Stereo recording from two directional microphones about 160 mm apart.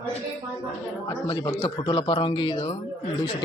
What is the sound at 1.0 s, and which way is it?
A man's voice, 25° left (ahead or behind).